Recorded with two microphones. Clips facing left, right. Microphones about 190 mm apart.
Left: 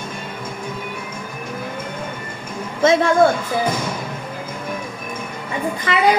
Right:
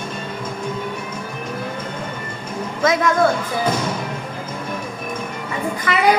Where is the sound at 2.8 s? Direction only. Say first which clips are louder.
Left 3 dB; 30° left (ahead or behind).